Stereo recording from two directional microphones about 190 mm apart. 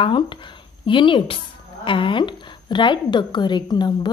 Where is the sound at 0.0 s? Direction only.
25° left (ahead or behind).